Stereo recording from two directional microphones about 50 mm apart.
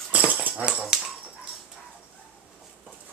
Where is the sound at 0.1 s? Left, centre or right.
Right.